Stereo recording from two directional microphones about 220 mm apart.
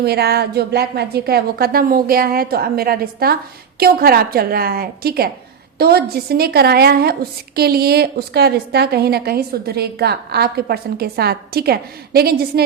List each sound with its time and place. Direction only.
0.0 s a woman's voice: 45° right (ahead or behind)